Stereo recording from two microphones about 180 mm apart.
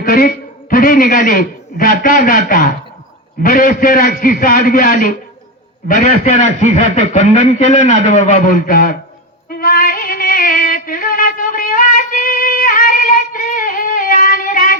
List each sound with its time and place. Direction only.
0.0 s a man's voice: 55° left (ahead or behind)
9.5 s music: 55° left (ahead or behind)